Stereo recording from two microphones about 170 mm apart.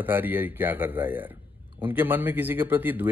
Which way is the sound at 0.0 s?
10° right (ahead or behind).